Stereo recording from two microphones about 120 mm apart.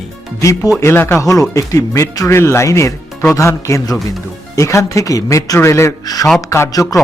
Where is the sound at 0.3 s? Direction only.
25° left (ahead or behind).